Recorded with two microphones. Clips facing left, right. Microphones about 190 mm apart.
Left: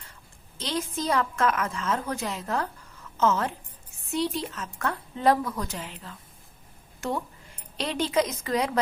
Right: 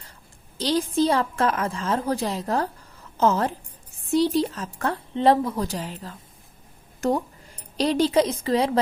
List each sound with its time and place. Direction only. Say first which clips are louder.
0.6 s a woman's voice: right 8 dB; 35° right (ahead or behind)